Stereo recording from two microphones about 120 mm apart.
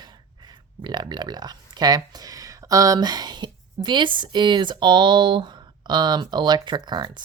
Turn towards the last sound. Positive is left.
turn(degrees=-40)  # may be behind; listen again after turning